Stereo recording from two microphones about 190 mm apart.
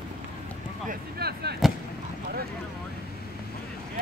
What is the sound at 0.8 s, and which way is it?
Speech, 55° right (ahead or behind).